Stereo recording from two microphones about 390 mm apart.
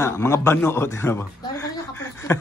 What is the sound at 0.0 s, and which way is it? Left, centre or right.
A woman's voice, centre.